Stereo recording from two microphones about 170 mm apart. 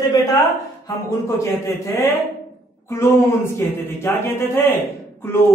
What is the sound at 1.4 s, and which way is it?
Speech, 15° left (ahead or behind).